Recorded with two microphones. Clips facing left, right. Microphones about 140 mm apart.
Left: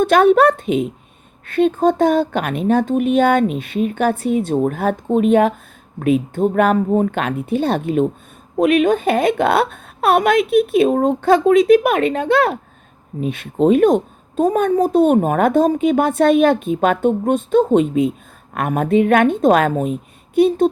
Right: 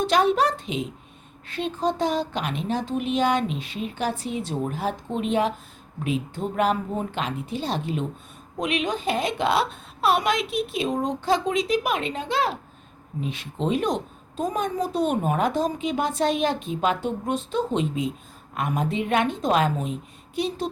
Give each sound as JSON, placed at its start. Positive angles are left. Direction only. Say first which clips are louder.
{"t": 0.0, "sound": "a woman's voice", "louder": "left 9 dB", "side_deg": 55}